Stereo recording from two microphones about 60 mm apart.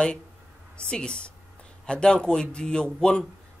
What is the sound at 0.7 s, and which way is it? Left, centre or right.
Speech, centre.